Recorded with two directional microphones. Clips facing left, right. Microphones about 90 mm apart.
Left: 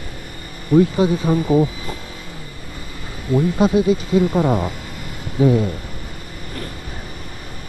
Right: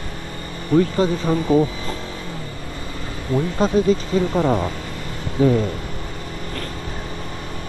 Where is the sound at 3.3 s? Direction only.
15° left (ahead or behind).